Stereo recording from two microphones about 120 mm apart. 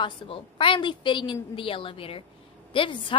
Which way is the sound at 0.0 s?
45° left (ahead or behind).